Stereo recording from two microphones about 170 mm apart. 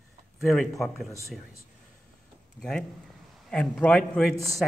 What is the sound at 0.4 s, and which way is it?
Speech, centre (ahead or behind).